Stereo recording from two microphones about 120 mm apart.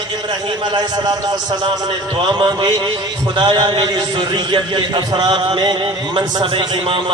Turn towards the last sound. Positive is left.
turn(degrees=-45)  # may be behind; listen again after turning